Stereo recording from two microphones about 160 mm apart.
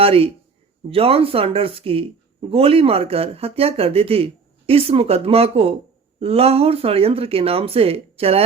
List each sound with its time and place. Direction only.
0.0 s speech: 35° right (ahead or behind)